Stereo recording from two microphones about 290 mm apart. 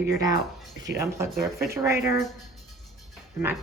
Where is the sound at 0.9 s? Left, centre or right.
Right.